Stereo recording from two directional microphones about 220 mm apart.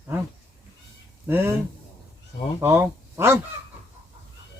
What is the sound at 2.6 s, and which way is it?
Speech, 10° right (ahead or behind).